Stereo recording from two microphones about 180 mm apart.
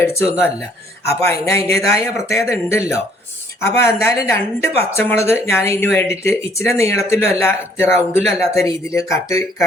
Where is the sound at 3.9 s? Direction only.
15° left (ahead or behind).